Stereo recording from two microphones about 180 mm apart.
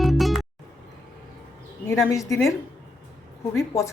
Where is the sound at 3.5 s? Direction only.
15° left (ahead or behind).